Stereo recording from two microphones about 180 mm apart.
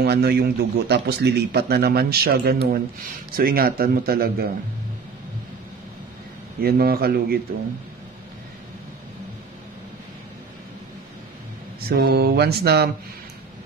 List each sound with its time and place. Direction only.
0.0 s speech: 60° right (ahead or behind)
6.6 s speech: 55° right (ahead or behind)
11.9 s speech: 60° right (ahead or behind)